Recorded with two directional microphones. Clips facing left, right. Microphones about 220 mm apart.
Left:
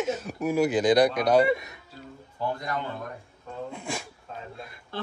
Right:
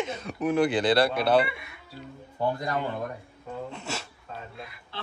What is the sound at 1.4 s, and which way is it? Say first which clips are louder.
Speech: left 11 dB; 40° left (ahead or behind).